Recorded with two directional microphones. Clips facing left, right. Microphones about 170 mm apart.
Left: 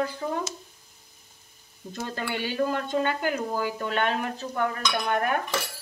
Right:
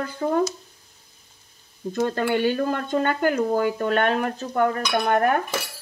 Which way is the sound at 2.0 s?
55° right (ahead or behind).